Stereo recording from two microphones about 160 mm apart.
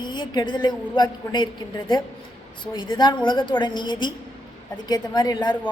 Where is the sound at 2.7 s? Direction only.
30° left (ahead or behind).